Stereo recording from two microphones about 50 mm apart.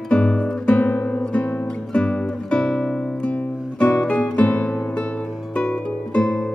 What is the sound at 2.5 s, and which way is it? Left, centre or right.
Music, centre.